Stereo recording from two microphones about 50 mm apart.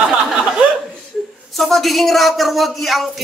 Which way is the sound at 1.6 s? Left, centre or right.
Centre.